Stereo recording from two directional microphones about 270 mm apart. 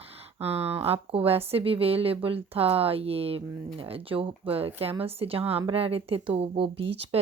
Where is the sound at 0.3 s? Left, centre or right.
Right.